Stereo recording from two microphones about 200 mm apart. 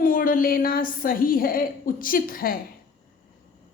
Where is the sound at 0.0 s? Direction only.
45° left (ahead or behind).